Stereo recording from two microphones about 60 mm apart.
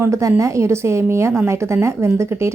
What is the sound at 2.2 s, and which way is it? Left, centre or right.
Speech, right.